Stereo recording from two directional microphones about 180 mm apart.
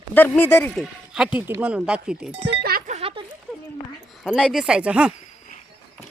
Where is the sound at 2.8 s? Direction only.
35° right (ahead or behind).